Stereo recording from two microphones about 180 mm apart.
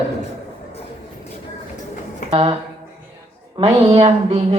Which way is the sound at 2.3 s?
35° right (ahead or behind).